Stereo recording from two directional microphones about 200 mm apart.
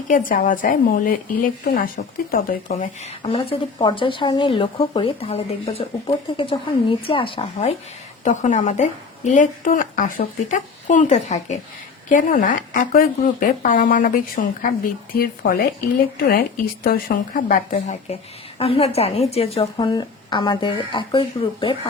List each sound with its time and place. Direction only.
0.1 s a woman's voice: 45° left (ahead or behind)
16.8 s a woman's voice: 45° left (ahead or behind); by 19.6 s 30° left (ahead or behind)
19.7 s speech: 20° left (ahead or behind)